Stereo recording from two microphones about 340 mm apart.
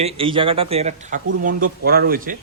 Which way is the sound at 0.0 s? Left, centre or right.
Centre.